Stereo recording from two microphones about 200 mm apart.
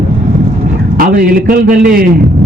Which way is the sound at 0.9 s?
45° right (ahead or behind).